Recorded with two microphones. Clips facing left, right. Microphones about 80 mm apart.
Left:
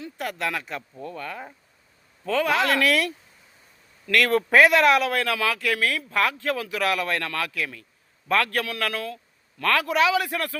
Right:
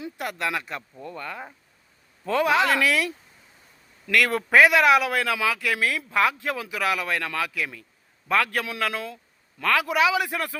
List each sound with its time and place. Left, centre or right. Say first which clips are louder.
0.2 s a man's voice: even; centre
4.3 s a man's voice: left 5 dB; centre
4.5 s a man's voice: right 1 dB; centre